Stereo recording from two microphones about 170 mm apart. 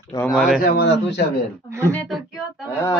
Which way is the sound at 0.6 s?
70° left (ahead or behind).